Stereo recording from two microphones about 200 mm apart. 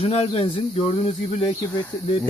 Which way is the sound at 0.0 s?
30° left (ahead or behind).